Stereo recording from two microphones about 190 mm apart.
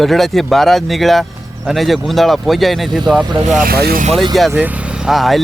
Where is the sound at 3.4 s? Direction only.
45° right (ahead or behind).